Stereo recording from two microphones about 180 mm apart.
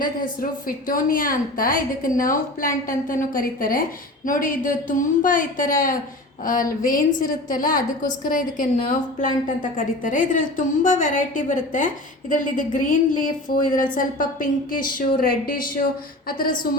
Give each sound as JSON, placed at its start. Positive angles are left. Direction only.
{"t": 0.9, "sound": "a woman's voice", "side_deg": 50}